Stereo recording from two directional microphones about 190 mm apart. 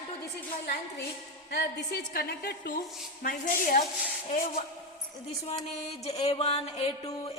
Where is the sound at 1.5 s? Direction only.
60° left (ahead or behind).